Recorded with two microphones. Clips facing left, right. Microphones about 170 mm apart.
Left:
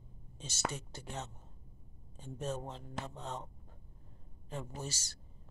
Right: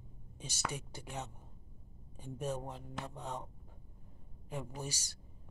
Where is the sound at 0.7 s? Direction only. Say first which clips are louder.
Even; 10° right (ahead or behind).